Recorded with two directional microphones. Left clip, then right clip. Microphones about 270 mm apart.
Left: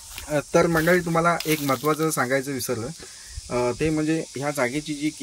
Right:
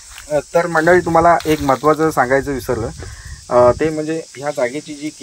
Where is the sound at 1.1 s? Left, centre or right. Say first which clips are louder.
Right 10 dB; centre.